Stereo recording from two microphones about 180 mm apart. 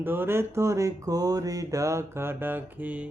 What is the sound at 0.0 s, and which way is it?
Mantra, 10° right (ahead or behind).